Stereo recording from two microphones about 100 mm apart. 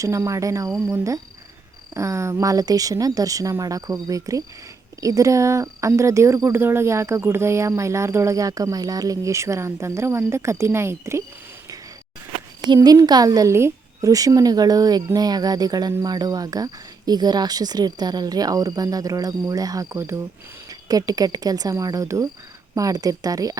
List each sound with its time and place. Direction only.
0.0 s a woman's voice: 30° right (ahead or behind)
12.6 s a woman's voice: 45° right (ahead or behind); by 20.2 s 25° right (ahead or behind)
20.7 s a woman's voice: 35° right (ahead or behind)